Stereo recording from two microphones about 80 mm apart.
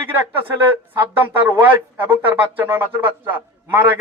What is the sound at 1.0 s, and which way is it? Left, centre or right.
Speech, right.